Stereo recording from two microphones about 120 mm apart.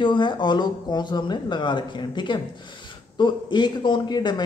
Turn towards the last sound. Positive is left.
turn(degrees=35)  # may be behind; listen again after turning